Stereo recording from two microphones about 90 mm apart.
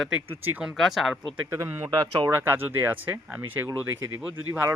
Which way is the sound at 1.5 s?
30° right (ahead or behind).